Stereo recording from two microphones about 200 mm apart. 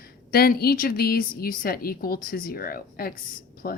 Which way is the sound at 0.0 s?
50° left (ahead or behind).